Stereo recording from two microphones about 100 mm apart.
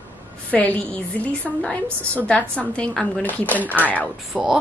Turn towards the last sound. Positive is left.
turn(degrees=-5)  # may be behind; listen again after turning